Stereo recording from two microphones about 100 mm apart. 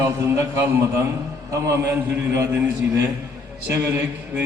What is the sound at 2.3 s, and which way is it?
Speech, 25° right (ahead or behind).